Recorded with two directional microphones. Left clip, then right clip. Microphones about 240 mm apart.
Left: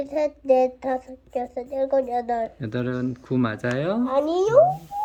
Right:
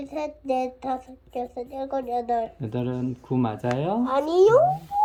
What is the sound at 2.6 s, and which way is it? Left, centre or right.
Speech, left.